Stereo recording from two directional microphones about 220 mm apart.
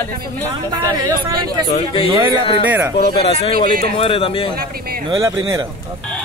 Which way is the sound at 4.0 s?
25° left (ahead or behind).